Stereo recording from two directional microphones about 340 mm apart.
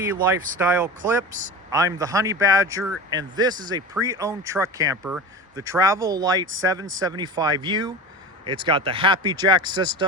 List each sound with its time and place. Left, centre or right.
0.0 s speech: centre